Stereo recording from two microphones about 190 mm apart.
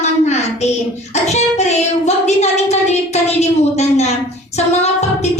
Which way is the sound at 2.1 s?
35° left (ahead or behind).